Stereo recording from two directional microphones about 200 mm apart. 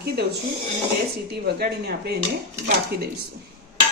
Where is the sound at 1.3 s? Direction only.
55° right (ahead or behind).